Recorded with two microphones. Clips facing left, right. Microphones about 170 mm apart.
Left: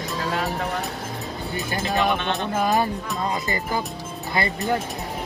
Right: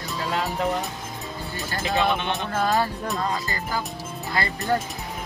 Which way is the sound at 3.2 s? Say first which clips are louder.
Left 2 dB; 20° left (ahead or behind).